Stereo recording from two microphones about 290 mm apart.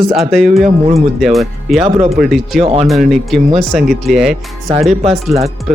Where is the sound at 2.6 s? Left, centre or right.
Right.